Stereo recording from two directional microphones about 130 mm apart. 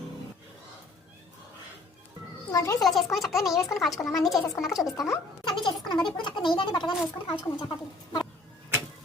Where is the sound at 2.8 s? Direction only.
Centre (ahead or behind).